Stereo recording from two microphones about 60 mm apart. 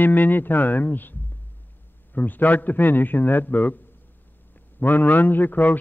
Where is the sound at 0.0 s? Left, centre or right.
Left.